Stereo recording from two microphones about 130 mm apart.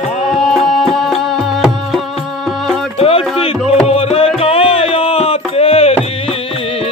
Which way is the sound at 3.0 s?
45° left (ahead or behind).